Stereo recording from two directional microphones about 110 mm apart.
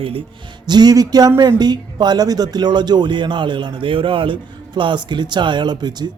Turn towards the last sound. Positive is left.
turn(degrees=-40)  # may be behind; listen again after turning